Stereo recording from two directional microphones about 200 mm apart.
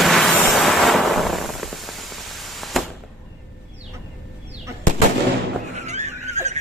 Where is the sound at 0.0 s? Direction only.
Centre (ahead or behind).